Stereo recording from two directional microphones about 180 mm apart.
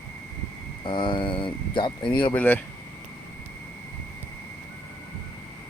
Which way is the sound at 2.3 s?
10° left (ahead or behind).